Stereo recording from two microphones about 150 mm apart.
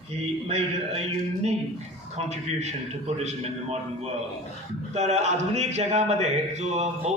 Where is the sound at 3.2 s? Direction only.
50° right (ahead or behind).